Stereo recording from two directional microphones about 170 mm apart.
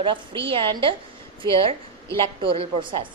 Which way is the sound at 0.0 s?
30° right (ahead or behind).